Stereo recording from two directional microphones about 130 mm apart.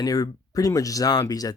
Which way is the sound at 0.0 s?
30° left (ahead or behind).